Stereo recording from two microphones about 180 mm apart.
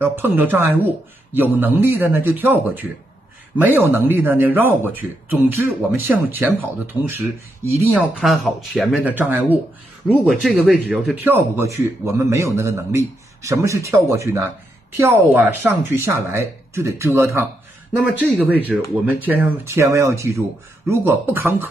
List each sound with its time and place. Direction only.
0.0 s a man's voice: 10° right (ahead or behind)
17.9 s a man's voice: centre (ahead or behind)